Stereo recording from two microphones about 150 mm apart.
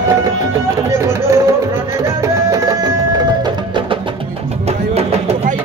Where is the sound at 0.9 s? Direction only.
20° right (ahead or behind).